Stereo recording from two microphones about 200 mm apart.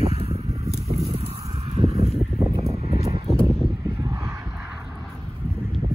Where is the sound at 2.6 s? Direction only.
30° right (ahead or behind).